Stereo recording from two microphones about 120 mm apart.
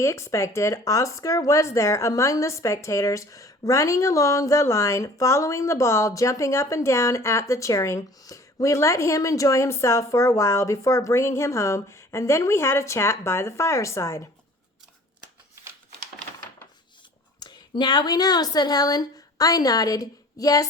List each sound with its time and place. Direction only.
0.0 s speech: 25° left (ahead or behind)
17.4 s speech: 35° left (ahead or behind)